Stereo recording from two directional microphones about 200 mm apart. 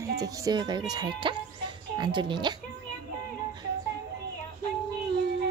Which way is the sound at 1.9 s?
20° right (ahead or behind).